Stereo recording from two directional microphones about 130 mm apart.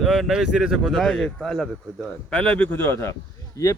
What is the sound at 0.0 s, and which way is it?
Speech, centre (ahead or behind).